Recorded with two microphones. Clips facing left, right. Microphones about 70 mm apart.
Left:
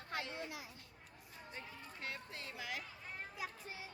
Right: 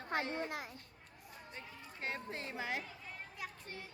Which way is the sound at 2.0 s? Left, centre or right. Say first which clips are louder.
Right 6 dB; right.